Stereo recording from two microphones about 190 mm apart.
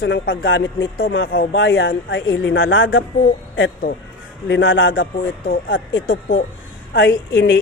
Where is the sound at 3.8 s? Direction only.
50° left (ahead or behind).